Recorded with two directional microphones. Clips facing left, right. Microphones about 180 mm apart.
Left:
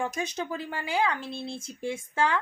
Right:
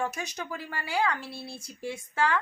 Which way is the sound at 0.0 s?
15° left (ahead or behind).